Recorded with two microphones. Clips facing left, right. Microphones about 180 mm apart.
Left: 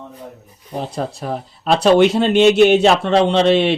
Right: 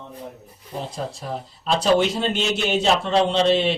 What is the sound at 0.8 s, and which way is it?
Speech, 65° left (ahead or behind).